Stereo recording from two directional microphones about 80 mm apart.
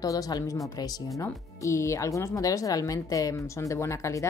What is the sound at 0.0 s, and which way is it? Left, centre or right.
Speech, left.